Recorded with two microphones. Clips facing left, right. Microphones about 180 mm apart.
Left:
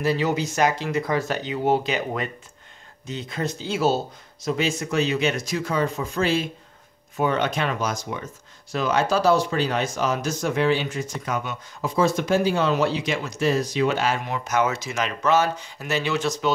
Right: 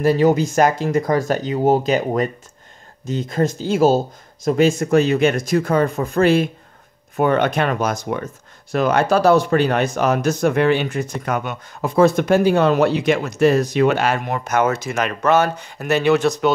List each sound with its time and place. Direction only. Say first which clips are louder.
0.0 s speech: right 8 dB; 45° right (ahead or behind)